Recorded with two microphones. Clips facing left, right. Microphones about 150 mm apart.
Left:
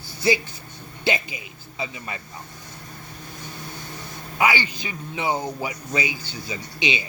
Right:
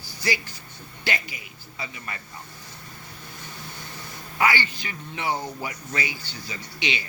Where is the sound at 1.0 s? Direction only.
20° left (ahead or behind).